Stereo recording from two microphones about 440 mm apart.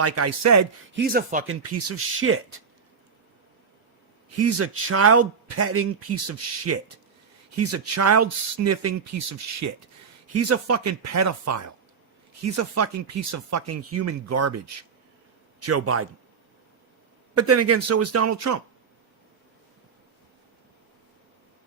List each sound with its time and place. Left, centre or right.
0.0 s a man's voice: right
0.9 s speech: centre
1.5 s speech: right
4.4 s a man's voice: right
15.6 s a man's voice: right
17.3 s a man's voice: right